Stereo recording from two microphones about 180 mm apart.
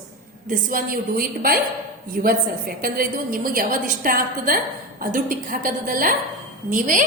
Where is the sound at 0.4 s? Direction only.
50° right (ahead or behind).